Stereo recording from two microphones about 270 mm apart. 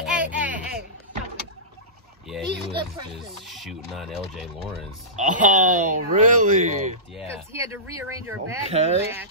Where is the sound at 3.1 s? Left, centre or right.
Centre.